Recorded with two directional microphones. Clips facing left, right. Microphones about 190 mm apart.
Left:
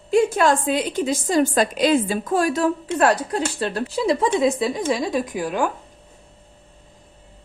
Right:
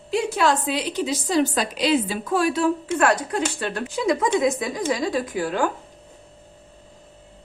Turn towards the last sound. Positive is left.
turn(degrees=15)  # may be behind; listen again after turning